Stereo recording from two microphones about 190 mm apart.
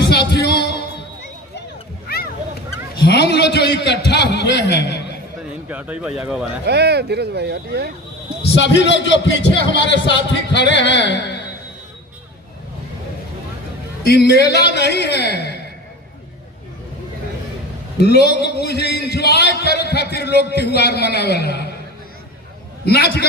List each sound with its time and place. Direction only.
0.3 s music: 60° left (ahead or behind)
2.0 s a sound: 55° left (ahead or behind)
2.9 s a man's voice: 60° left (ahead or behind)
5.6 s speech: 10° right (ahead or behind)
6.7 s speech: 60° right (ahead or behind)
8.5 s a man's voice: 65° left (ahead or behind)
14.0 s a man's voice: 60° left (ahead or behind)
18.0 s a man's voice: 60° left (ahead or behind)
22.9 s a man's voice: 55° left (ahead or behind)